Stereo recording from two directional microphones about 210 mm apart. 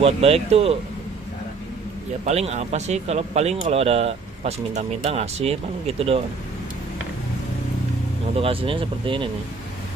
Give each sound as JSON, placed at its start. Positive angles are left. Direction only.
{"t": 0.0, "sound": "speech", "side_deg": -30}
{"t": 2.2, "sound": "speech", "side_deg": -30}
{"t": 8.4, "sound": "speech", "side_deg": -25}